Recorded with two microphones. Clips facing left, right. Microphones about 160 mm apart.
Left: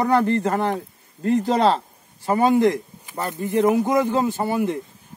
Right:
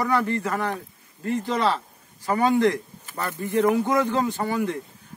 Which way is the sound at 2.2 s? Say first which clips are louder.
Left 3 dB; 20° left (ahead or behind).